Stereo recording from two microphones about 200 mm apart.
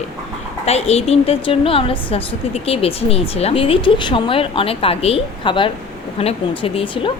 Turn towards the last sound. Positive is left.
turn(degrees=25)  # may be behind; listen again after turning